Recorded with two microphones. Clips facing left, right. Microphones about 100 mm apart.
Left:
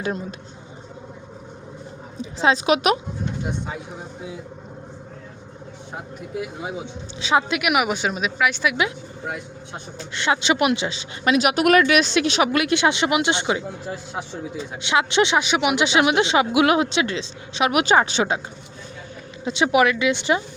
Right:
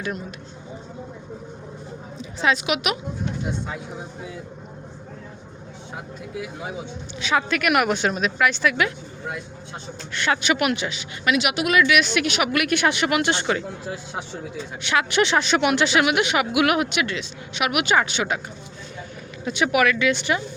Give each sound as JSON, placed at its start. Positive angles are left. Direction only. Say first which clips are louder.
{"t": 0.0, "sound": "speech", "louder": "left 3 dB", "side_deg": 30}
{"t": 2.4, "sound": "a woman's voice", "louder": "left 4 dB", "side_deg": 35}
{"t": 7.2, "sound": "speech", "louder": "left 2 dB", "side_deg": 25}
{"t": 7.6, "sound": "speech", "louder": "right 1 dB", "side_deg": 5}
{"t": 10.2, "sound": "speech", "louder": "left 2 dB", "side_deg": 25}
{"t": 11.6, "sound": "speech", "louder": "left 4 dB", "side_deg": 55}
{"t": 11.9, "sound": "speech", "louder": "left 2 dB", "side_deg": 35}
{"t": 13.8, "sound": "speech", "louder": "left 1 dB", "side_deg": 0}
{"t": 14.8, "sound": "speech", "louder": "left 2 dB", "side_deg": 20}
{"t": 19.5, "sound": "speech", "louder": "left 2 dB", "side_deg": 25}